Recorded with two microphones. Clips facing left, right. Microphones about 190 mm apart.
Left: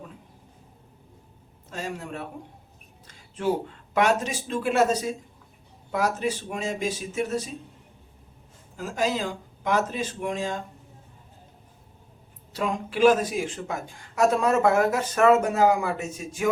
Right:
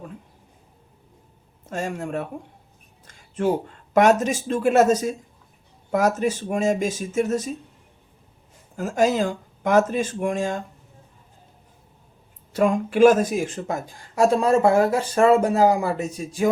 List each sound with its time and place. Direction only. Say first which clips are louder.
1.7 s speech: right 6 dB; 50° right (ahead or behind)
8.7 s speech: right 6 dB; 45° right (ahead or behind)
12.5 s speech: right 8 dB; 50° right (ahead or behind)